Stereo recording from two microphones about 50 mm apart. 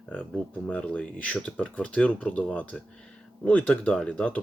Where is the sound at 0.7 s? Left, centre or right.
Left.